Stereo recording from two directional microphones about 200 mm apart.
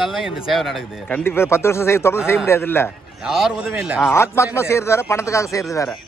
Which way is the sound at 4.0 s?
15° left (ahead or behind).